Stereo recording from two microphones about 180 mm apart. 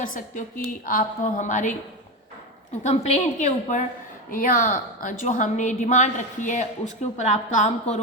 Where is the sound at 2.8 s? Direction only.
40° left (ahead or behind).